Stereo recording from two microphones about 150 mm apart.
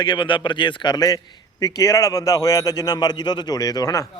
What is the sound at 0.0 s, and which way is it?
A man's voice, 30° left (ahead or behind).